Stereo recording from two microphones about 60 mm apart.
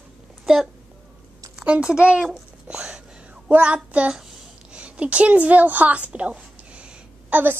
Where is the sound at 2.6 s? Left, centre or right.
Centre.